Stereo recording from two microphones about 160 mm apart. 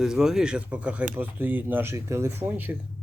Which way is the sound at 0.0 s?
5° right (ahead or behind).